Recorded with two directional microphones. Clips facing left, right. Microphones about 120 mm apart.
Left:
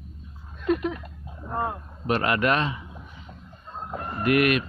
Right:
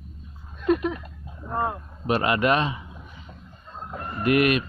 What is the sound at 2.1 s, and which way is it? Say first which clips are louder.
Speech: right 1 dB; 20° right (ahead or behind).